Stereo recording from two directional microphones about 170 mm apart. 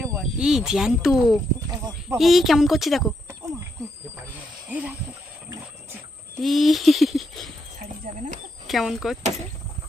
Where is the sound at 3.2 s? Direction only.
20° right (ahead or behind).